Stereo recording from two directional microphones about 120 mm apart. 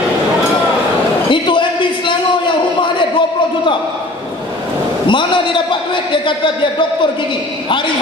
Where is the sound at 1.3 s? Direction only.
45° left (ahead or behind).